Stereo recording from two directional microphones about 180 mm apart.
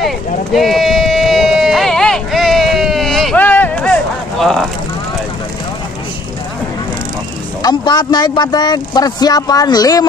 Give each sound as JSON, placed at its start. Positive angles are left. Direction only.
{"t": 0.0, "sound": "sheep", "side_deg": 0}
{"t": 7.6, "sound": "speech", "side_deg": 25}